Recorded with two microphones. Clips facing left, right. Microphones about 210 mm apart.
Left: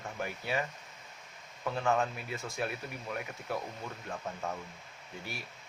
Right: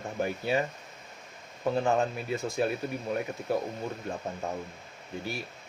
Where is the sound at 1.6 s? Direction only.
30° right (ahead or behind).